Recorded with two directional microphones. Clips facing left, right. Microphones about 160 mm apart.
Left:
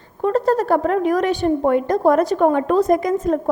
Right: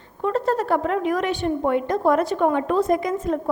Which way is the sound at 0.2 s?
40° left (ahead or behind).